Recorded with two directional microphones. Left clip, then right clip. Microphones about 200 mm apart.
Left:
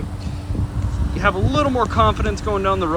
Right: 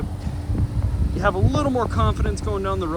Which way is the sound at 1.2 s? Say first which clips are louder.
Left 3 dB; 5° right (ahead or behind).